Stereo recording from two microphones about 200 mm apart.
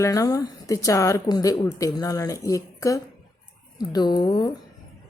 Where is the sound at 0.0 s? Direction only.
15° left (ahead or behind).